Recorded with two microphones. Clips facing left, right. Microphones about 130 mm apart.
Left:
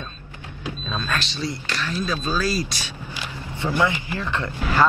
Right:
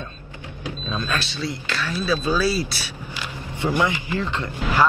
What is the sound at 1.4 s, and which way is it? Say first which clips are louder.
Speech: right 1 dB; 15° left (ahead or behind).